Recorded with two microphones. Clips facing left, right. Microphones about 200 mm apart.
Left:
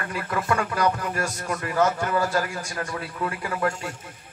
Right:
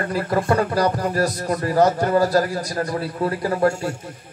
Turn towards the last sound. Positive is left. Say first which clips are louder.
# right 7 dB
turn(degrees=-40)  # may be behind; listen again after turning